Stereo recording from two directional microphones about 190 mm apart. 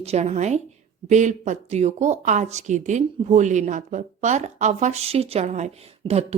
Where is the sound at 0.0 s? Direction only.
35° right (ahead or behind).